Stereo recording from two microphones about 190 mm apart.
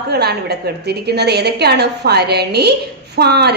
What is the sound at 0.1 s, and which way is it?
A woman's voice, 60° right (ahead or behind).